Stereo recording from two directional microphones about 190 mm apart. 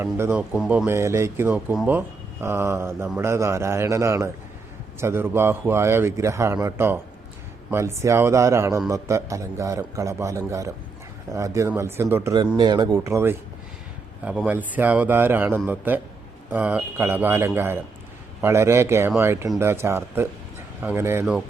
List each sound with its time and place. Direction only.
0.0 s a man's voice: 10° right (ahead or behind)